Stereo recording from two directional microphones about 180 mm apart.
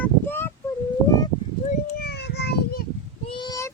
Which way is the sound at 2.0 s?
65° left (ahead or behind).